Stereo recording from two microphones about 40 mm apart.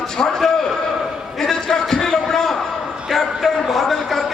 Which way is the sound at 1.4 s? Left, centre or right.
Centre.